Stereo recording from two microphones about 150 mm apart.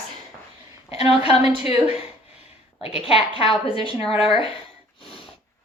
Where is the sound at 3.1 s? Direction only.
40° left (ahead or behind).